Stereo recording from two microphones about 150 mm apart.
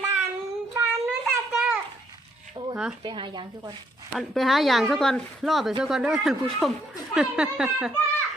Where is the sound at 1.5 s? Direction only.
5° right (ahead or behind).